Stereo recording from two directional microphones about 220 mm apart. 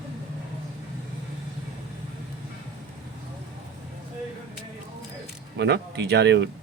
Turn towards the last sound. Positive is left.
turn(degrees=-50)  # may be behind; listen again after turning